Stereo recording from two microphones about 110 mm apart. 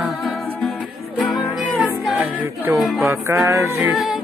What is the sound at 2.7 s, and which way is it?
Speech, centre (ahead or behind).